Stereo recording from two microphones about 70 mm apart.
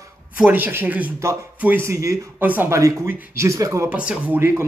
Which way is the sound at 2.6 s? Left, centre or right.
Right.